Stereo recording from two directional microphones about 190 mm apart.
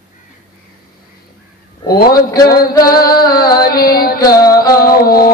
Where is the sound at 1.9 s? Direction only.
50° left (ahead or behind).